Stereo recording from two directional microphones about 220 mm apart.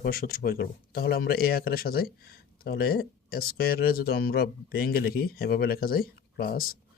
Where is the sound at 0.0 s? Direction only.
45° left (ahead or behind).